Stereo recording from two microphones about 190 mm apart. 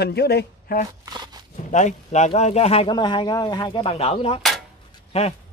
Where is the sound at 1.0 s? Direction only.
20° right (ahead or behind).